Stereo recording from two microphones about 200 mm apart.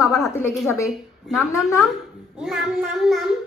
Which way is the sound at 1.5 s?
15° left (ahead or behind).